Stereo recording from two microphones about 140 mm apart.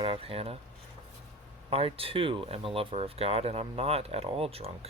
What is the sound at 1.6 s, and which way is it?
Speech, 45° right (ahead or behind).